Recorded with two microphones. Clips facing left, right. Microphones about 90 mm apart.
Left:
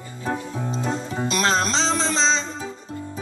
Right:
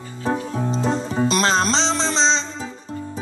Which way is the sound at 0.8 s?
35° right (ahead or behind).